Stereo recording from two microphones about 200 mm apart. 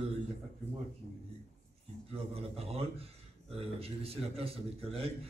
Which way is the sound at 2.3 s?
30° right (ahead or behind).